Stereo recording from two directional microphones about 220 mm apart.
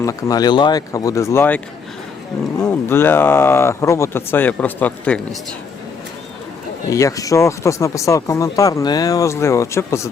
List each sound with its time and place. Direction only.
0.0 s speech: 15° left (ahead or behind)
6.9 s speech: 15° left (ahead or behind)